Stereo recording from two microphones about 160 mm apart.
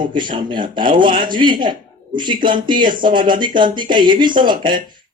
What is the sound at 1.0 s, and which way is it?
Speech, 60° right (ahead or behind).